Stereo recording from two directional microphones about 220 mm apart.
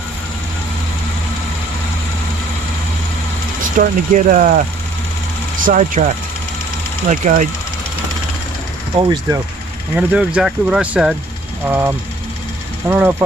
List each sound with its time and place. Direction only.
3.8 s speech: 35° right (ahead or behind)
5.6 s speech: 35° right (ahead or behind)
7.1 s speech: 35° right (ahead or behind)
9.0 s speech: 20° right (ahead or behind)
9.9 s speech: 5° right (ahead or behind)